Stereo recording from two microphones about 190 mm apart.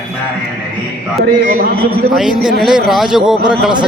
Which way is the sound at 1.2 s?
55° right (ahead or behind).